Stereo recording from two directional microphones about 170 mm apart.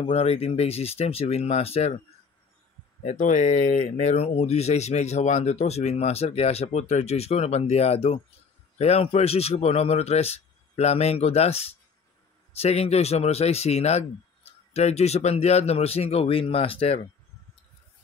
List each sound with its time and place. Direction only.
0.0 s speech: 35° left (ahead or behind)
3.0 s speech: 45° left (ahead or behind)